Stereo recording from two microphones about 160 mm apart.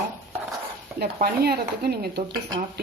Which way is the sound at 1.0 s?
80° right.